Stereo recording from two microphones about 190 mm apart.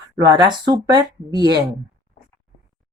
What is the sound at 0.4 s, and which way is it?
Speech, 25° right (ahead or behind).